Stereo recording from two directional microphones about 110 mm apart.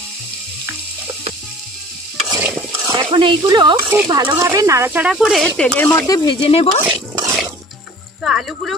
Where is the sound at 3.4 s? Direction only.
45° right (ahead or behind); by 4.9 s 25° right (ahead or behind).